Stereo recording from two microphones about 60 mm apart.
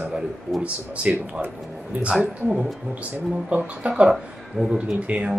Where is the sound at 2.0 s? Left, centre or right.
Centre.